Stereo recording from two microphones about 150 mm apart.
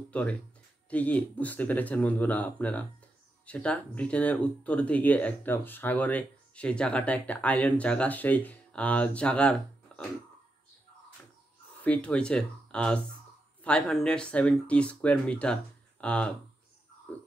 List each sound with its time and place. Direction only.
0.1 s speech: 10° left (ahead or behind)
11.8 s speech: 10° left (ahead or behind)